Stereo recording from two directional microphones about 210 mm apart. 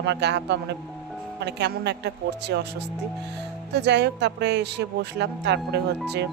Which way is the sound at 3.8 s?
55° right (ahead or behind).